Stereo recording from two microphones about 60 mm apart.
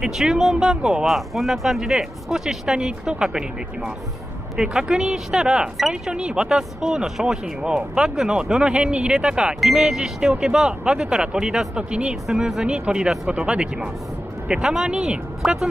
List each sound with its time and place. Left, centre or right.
0.0 s speech: centre
1.0 s speech: centre
12.3 s speech: centre